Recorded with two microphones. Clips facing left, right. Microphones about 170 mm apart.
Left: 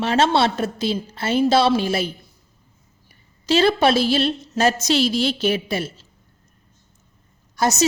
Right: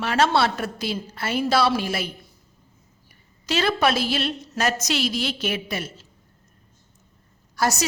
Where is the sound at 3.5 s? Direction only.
30° left (ahead or behind).